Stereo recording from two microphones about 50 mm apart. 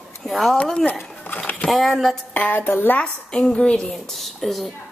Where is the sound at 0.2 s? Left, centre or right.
Centre.